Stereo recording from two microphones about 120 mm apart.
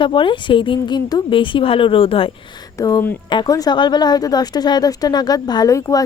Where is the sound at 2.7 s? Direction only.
25° left (ahead or behind).